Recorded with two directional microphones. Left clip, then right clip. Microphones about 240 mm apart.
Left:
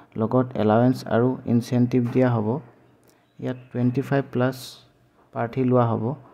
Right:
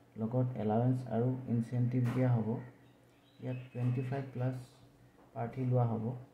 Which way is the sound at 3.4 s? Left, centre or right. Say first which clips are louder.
Left 15 dB; left.